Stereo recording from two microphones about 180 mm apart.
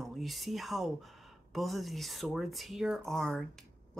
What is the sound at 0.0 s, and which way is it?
Speech, centre (ahead or behind).